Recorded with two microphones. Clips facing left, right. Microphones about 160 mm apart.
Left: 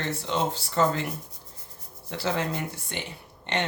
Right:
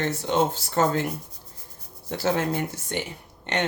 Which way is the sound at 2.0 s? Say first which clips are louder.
Right 4 dB; 50° right (ahead or behind).